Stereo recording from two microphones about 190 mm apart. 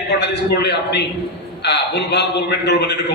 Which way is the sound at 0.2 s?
60° left (ahead or behind).